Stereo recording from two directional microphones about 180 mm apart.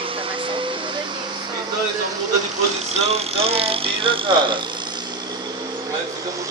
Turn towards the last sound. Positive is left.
turn(degrees=-30)  # may be behind; listen again after turning